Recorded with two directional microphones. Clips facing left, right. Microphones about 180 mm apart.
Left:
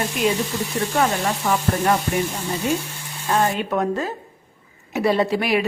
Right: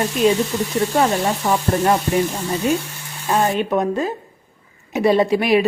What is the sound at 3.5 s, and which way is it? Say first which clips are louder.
Speech: right 3 dB; 20° right (ahead or behind).